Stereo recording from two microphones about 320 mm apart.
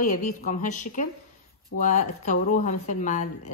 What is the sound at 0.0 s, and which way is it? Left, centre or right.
Speech, left.